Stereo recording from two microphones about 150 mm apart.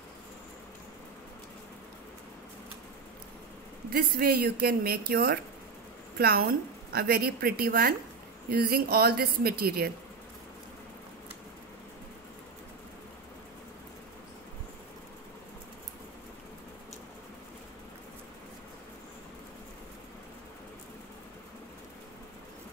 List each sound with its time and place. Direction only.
3.9 s a woman's voice: 75° right (ahead or behind)